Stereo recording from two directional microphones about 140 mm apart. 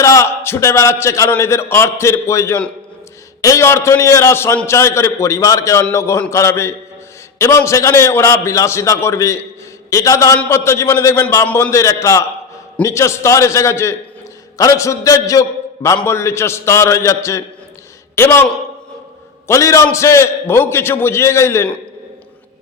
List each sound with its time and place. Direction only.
0.0 s a man's voice: 20° left (ahead or behind)
19.5 s a man's voice: 20° left (ahead or behind)